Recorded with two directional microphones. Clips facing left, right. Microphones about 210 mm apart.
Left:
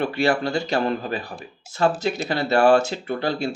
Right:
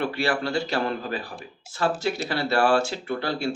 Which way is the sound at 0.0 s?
20° left (ahead or behind).